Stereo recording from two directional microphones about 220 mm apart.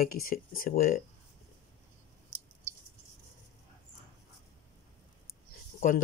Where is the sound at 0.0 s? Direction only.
40° left (ahead or behind).